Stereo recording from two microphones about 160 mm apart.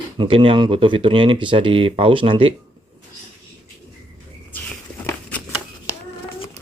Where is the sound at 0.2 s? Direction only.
35° right (ahead or behind).